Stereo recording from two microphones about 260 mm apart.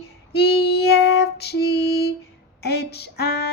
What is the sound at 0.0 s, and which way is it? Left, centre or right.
Female singing, left.